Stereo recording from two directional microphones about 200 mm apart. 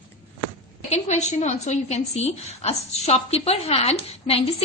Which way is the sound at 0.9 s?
35° left (ahead or behind).